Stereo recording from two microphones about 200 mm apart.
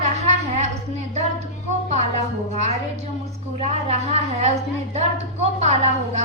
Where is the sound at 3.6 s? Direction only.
35° right (ahead or behind).